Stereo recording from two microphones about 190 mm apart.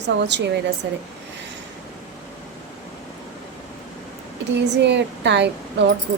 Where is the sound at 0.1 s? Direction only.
65° right (ahead or behind).